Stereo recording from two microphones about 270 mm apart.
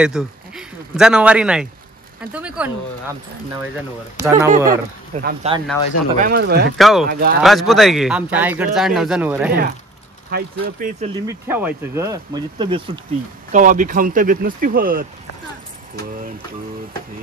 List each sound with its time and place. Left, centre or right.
0.0 s speech: centre
4.2 s speech: centre
4.6 s speech: right
6.8 s speech: centre
7.1 s speech: right
7.4 s speech: centre
10.3 s speech: right
11.2 s speech: centre
13.5 s speech: right